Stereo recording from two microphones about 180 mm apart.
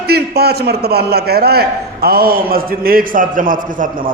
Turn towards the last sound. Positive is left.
turn(degrees=-50)  # may be behind; listen again after turning